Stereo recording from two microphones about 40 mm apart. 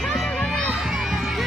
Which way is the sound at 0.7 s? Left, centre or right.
Centre.